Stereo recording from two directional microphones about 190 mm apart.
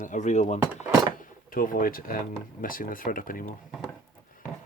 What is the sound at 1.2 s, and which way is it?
Speech, 45° left (ahead or behind).